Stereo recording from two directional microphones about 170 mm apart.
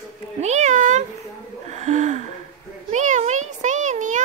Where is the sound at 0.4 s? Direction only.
40° right (ahead or behind).